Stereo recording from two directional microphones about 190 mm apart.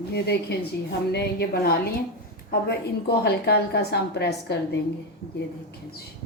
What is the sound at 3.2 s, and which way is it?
Speech, 60° left (ahead or behind).